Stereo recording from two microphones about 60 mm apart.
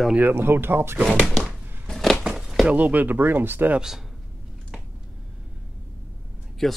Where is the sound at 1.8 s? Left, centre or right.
Centre.